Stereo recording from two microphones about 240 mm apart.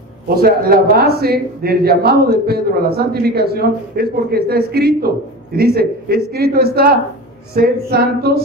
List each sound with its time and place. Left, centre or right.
0.3 s a man's voice: right